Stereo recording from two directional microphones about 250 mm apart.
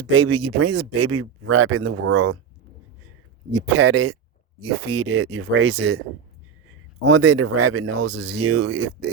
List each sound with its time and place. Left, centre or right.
0.0 s speech: right
3.5 s speech: right
4.9 s speech: right
5.2 s speech: right
7.3 s speech: right